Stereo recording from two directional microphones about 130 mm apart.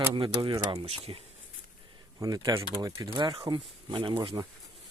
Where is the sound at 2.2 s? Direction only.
25° right (ahead or behind).